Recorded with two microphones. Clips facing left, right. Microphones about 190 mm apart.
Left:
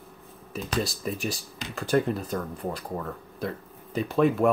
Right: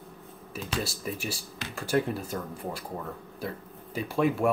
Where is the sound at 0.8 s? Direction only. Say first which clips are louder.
Left 5 dB; 10° right (ahead or behind).